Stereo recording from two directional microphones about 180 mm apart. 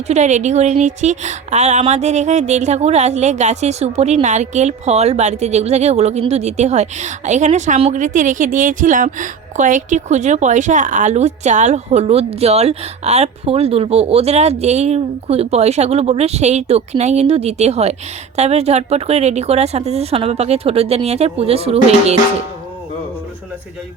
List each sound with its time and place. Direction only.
0.1 s speech: 40° right (ahead or behind)